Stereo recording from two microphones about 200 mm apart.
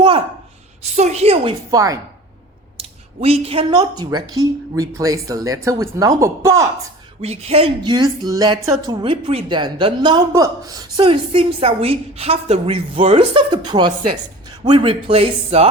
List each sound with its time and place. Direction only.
0.8 s a woman's voice: 35° right (ahead or behind)
1.7 s speech: 15° right (ahead or behind)
2.7 s speech: 30° right (ahead or behind)
7.2 s a woman's voice: 30° right (ahead or behind)